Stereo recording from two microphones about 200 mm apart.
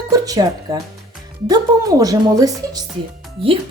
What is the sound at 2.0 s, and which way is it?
Speech, 15° right (ahead or behind).